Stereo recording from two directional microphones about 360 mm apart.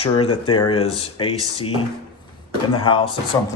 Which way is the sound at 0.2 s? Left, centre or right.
Centre.